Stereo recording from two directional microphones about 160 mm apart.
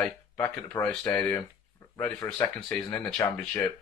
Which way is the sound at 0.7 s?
10° left (ahead or behind).